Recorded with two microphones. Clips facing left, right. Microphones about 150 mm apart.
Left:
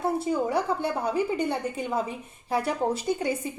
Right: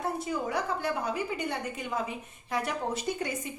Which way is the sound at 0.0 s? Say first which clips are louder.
Left 6 dB; 30° left (ahead or behind).